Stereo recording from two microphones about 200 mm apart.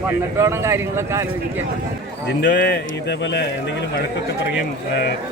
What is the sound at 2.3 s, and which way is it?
Speech, 55° left (ahead or behind).